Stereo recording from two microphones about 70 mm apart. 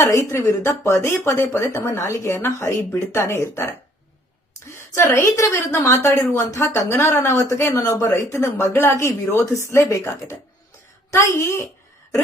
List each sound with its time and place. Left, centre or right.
0.1 s a woman's voice: left
4.8 s a woman's voice: left